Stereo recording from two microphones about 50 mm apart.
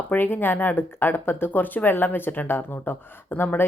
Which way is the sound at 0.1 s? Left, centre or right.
Left.